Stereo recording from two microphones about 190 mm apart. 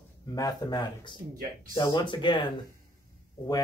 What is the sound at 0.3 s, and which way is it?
Speech, 20° left (ahead or behind).